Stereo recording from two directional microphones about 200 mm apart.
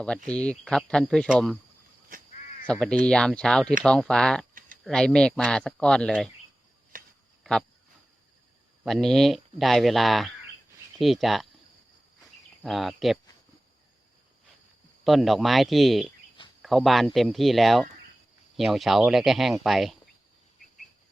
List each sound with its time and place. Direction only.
0.3 s speech: 5° left (ahead or behind)
2.6 s speech: 5° left (ahead or behind)
6.9 s a sound: 45° right (ahead or behind)
8.8 s speech: centre (ahead or behind)
12.6 s speech: centre (ahead or behind)
15.0 s speech: centre (ahead or behind)